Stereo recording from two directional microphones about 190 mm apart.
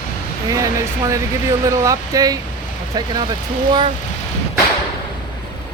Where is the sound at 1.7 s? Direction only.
20° right (ahead or behind).